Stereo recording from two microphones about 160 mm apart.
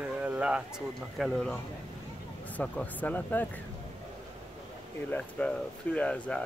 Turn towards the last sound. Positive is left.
turn(degrees=5)  # may be behind; listen again after turning